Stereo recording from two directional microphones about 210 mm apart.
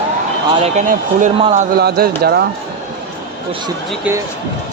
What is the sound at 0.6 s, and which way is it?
Speech, 35° right (ahead or behind).